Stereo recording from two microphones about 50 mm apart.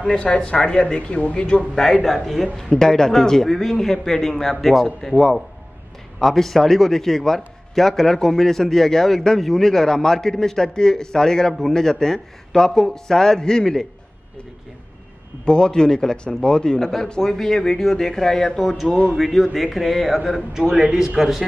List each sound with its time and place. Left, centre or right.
0.2 s a man's voice: centre
2.0 s a man's voice: centre
15.4 s a man's voice: centre